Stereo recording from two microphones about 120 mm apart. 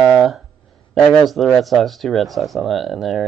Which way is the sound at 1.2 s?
Centre (ahead or behind).